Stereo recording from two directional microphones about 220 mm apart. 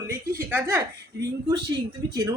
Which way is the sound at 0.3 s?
10° right (ahead or behind).